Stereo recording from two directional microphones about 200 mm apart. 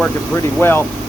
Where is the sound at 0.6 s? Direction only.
10° left (ahead or behind).